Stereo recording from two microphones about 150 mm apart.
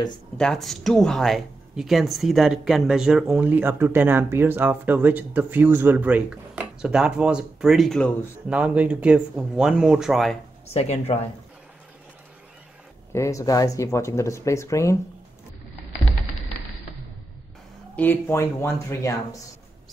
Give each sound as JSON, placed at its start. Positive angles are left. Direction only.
{"t": 0.4, "sound": "speech", "side_deg": 0}
{"t": 8.5, "sound": "speech", "side_deg": -10}
{"t": 10.7, "sound": "speech", "side_deg": 45}
{"t": 13.1, "sound": "speech", "side_deg": 20}
{"t": 17.9, "sound": "speech", "side_deg": 15}